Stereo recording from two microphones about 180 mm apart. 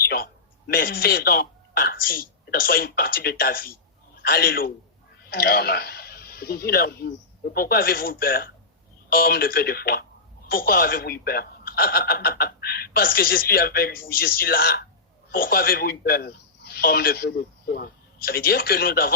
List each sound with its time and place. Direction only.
0.7 s a man's voice: 55° left (ahead or behind)